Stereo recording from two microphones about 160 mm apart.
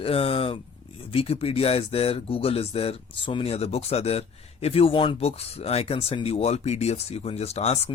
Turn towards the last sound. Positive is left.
turn(degrees=40)  # may be behind; listen again after turning